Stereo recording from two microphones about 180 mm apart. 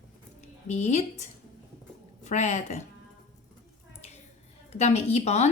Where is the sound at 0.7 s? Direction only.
40° left (ahead or behind).